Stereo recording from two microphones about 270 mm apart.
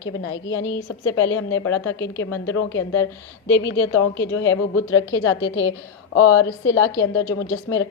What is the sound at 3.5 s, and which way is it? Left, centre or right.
A woman's voice, left.